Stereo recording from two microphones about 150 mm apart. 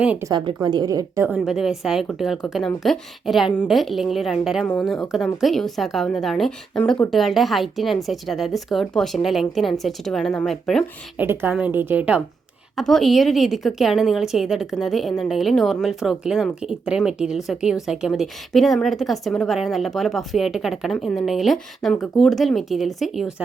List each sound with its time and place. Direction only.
0.0 s a woman's voice: 10° right (ahead or behind)
0.3 s a woman's voice: 30° right (ahead or behind)
1.5 s a woman's voice: 5° right (ahead or behind)
11.2 s a woman's voice: 15° right (ahead or behind)
12.7 s a woman's voice: centre (ahead or behind)